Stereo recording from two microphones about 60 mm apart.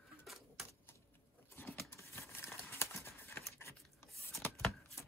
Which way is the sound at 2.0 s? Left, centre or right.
Left.